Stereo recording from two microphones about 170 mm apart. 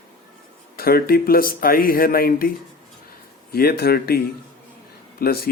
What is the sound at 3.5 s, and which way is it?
Speech, 65° left (ahead or behind).